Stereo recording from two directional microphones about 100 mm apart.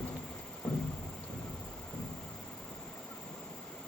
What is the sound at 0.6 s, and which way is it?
Thunder, 10° left (ahead or behind).